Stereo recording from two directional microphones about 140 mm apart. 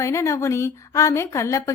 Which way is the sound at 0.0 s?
20° left (ahead or behind).